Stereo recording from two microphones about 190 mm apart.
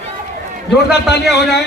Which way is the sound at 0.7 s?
60° left (ahead or behind).